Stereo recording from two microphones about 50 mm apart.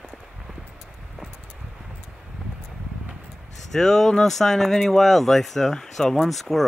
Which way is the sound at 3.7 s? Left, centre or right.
Centre.